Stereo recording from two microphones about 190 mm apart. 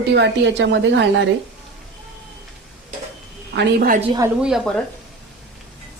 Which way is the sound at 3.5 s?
55° right (ahead or behind).